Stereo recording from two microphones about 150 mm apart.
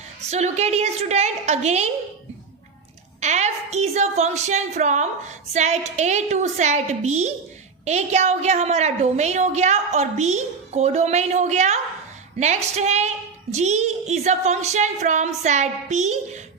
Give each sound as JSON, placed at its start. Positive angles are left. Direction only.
{"t": 0.3, "sound": "a woman's voice", "side_deg": -50}
{"t": 3.2, "sound": "a woman's voice", "side_deg": -50}